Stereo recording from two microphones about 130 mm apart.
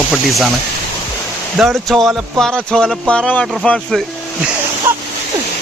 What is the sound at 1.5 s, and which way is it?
Speech, centre (ahead or behind).